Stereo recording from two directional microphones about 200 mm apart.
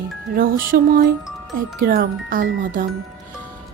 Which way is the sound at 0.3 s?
45° right (ahead or behind).